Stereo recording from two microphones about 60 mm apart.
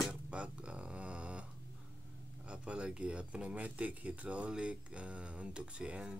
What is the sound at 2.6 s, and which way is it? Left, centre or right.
Speech, centre.